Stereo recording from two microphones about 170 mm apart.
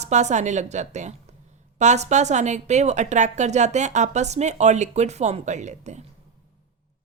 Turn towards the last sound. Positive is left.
turn(degrees=-45)  # may be behind; listen again after turning